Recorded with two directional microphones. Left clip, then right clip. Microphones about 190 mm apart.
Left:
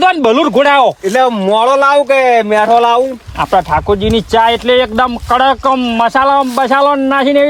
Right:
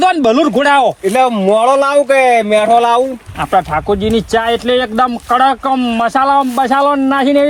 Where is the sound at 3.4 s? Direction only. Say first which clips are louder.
Left 2 dB; 50° left (ahead or behind).